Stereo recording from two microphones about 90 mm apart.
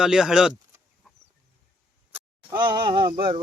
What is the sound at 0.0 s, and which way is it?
Speech, 5° right (ahead or behind).